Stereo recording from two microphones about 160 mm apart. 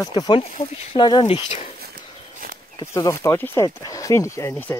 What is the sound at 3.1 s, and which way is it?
Speech, 15° left (ahead or behind).